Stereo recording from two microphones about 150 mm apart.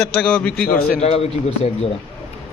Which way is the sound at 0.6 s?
90° left.